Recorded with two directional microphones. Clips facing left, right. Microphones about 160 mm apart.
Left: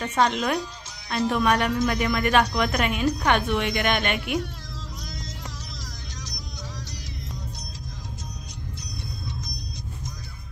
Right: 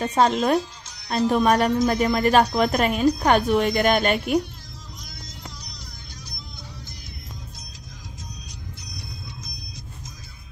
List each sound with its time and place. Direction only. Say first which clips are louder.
0.0 s speech: right 3 dB; 35° right (ahead or behind)